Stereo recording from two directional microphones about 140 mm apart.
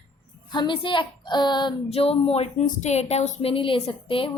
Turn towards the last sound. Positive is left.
turn(degrees=40)  # may be behind; listen again after turning